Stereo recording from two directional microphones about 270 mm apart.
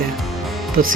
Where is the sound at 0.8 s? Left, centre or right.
Right.